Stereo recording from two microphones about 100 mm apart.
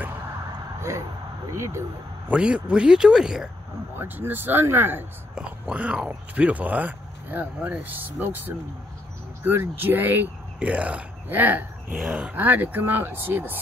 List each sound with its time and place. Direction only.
0.7 s a sound: 25° right (ahead or behind)
1.5 s speech: 30° right (ahead or behind)
2.2 s speech: 10° right (ahead or behind)
4.0 s speech: 20° right (ahead or behind)